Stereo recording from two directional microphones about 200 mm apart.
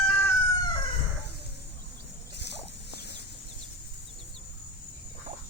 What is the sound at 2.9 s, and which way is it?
Chicken, 55° left (ahead or behind).